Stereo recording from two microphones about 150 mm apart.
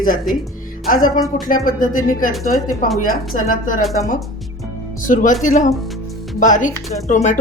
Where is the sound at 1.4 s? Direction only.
65° left (ahead or behind).